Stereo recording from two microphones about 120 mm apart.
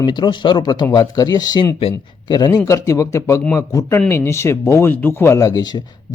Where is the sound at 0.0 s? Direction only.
40° left (ahead or behind).